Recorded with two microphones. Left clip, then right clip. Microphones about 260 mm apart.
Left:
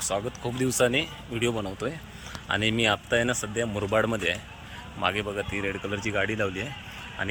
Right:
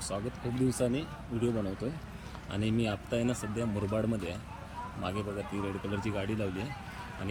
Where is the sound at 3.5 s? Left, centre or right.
Left.